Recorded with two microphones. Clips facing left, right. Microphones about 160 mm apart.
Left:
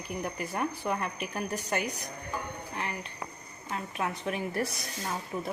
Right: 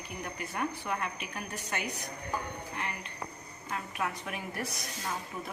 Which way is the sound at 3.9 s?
30° left (ahead or behind).